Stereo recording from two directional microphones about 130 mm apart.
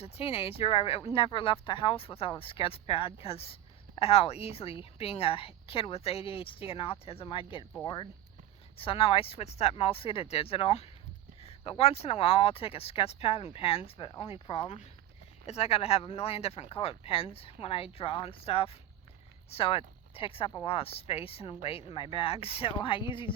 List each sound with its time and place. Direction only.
0.0 s a woman's voice: 45° left (ahead or behind)
8.8 s a woman's voice: 45° left (ahead or behind)